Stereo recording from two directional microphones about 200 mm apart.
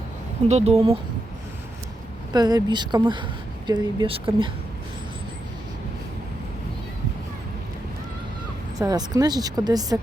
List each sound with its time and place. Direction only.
0.4 s speech: 35° right (ahead or behind)
2.3 s speech: 20° right (ahead or behind)
8.8 s speech: 15° right (ahead or behind)